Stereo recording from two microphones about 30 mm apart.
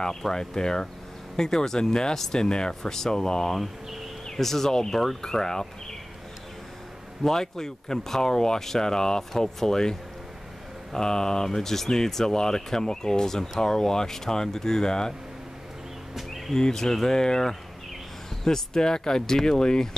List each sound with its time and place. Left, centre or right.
0.3 s speech: left
7.2 s speech: centre
16.2 s a sound: centre
16.5 s speech: centre